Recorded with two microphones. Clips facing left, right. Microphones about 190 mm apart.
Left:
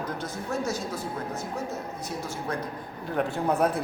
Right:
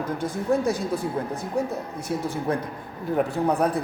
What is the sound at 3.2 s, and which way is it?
Speech, centre (ahead or behind).